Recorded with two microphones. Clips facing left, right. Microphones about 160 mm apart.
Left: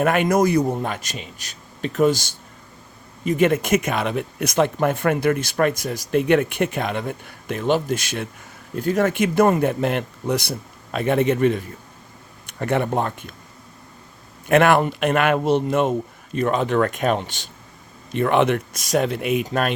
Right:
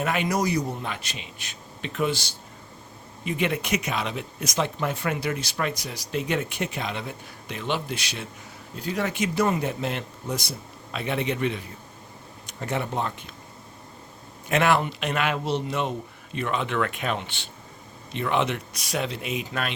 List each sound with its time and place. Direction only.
0.0 s speech: 55° left (ahead or behind)
10.9 s speech: 50° left (ahead or behind)
12.5 s speech: 60° left (ahead or behind)
14.4 s speech: 55° left (ahead or behind)
18.1 s speech: 55° left (ahead or behind)
19.5 s speech: 45° left (ahead or behind)